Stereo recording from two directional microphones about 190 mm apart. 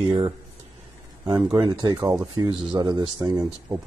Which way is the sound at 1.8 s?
20° right (ahead or behind).